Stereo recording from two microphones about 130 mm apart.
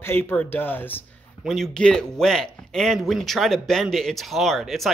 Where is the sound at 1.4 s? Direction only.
Centre (ahead or behind).